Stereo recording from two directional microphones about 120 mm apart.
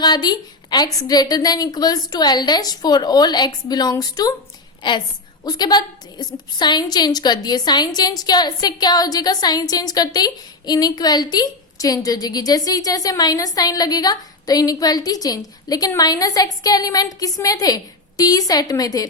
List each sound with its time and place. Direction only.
0.0 s a woman's voice: 35° left (ahead or behind)
4.8 s a woman's voice: 40° left (ahead or behind)